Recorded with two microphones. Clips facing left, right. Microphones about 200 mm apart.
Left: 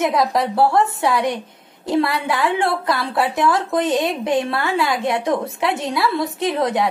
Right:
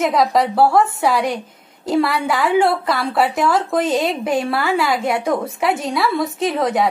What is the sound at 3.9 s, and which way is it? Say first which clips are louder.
A woman's voice: even; centre (ahead or behind).